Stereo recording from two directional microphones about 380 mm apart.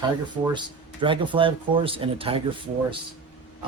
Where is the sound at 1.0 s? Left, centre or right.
Centre.